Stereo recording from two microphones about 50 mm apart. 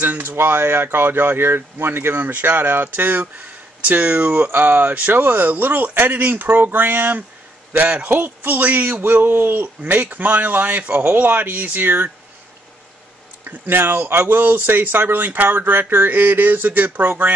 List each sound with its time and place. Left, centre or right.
0.0 s speech: right
0.4 s speech: right
13.4 s speech: right